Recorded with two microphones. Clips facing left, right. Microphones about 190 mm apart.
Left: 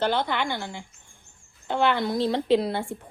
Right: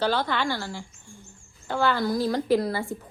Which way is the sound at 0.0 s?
20° left (ahead or behind).